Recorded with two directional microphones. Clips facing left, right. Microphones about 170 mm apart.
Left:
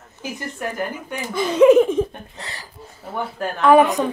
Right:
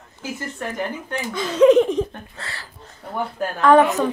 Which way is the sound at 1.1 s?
10° left (ahead or behind).